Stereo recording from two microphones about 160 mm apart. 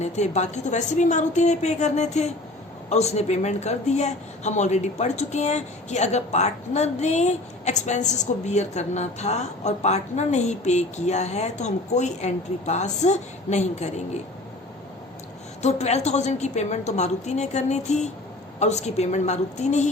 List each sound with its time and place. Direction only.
0.0 s speech: 45° left (ahead or behind)
15.6 s speech: 45° left (ahead or behind)